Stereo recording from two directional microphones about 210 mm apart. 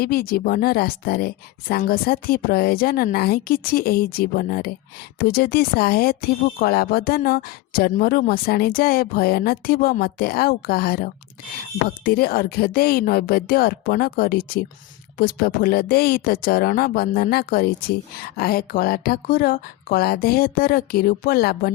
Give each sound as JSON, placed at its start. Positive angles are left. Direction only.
{"t": 0.0, "sound": "speech", "side_deg": 45}